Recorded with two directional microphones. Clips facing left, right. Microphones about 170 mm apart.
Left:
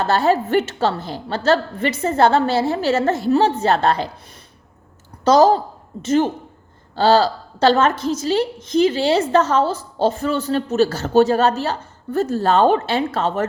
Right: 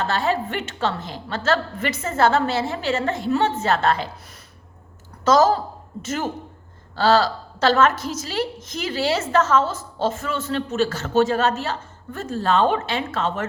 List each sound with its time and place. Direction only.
0.0 s a woman's voice: 40° left (ahead or behind)
5.2 s a woman's voice: 30° left (ahead or behind)